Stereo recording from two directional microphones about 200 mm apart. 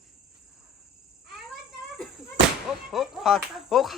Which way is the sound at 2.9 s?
Centre (ahead or behind).